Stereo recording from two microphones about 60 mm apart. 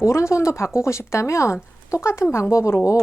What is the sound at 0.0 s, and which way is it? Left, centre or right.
Speech, left.